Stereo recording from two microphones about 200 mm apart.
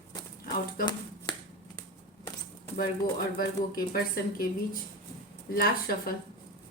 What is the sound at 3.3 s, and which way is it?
Speech, 50° left (ahead or behind).